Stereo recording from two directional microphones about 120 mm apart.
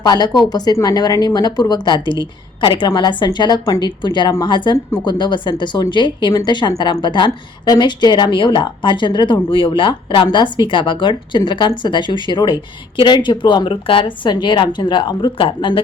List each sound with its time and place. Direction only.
0.0 s speech: 35° left (ahead or behind)